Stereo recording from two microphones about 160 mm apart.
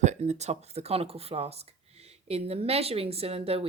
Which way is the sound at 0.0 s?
45° right (ahead or behind).